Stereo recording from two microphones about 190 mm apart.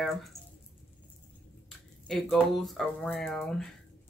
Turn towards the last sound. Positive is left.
turn(degrees=5)  # may be behind; listen again after turning